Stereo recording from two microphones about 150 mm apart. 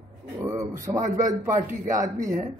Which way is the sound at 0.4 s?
20° right (ahead or behind).